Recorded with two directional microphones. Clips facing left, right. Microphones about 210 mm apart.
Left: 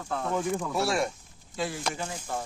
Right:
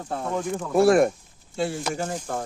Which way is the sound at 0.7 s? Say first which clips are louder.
Right 10 dB; 50° right (ahead or behind).